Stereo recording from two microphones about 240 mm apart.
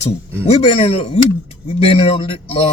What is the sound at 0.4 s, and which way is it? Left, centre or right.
Speech, left.